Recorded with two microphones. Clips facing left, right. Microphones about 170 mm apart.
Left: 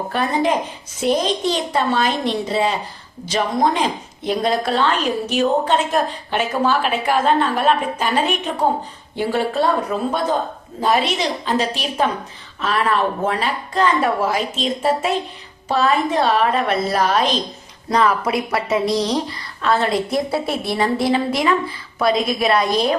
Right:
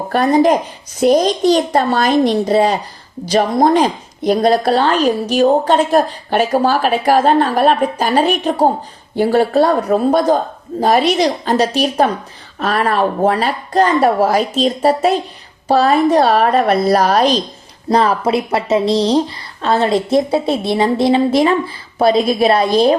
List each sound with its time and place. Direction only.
0.1 s a woman's voice: 40° right (ahead or behind)